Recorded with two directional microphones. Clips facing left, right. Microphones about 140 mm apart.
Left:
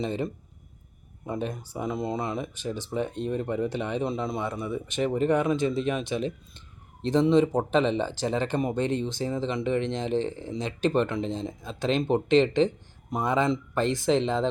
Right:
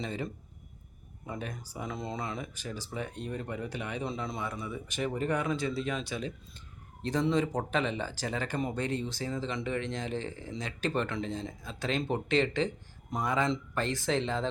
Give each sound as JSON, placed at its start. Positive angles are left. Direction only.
{"t": 0.0, "sound": "speech", "side_deg": 25}
{"t": 1.3, "sound": "speech", "side_deg": 25}